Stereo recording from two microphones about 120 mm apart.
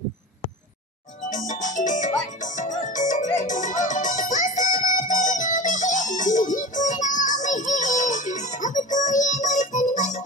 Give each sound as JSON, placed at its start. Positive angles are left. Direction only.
{"t": 1.3, "sound": "music", "side_deg": 90}